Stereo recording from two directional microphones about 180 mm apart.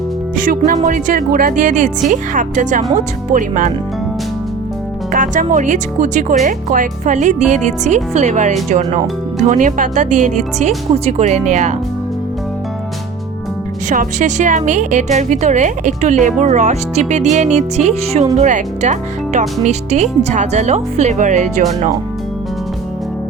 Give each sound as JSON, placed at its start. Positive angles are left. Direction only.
{"t": 0.3, "sound": "speech", "side_deg": -50}
{"t": 5.1, "sound": "a woman's voice", "side_deg": -45}
{"t": 13.9, "sound": "a woman's voice", "side_deg": -45}